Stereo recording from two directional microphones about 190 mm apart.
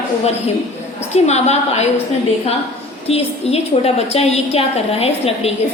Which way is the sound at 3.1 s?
30° left (ahead or behind).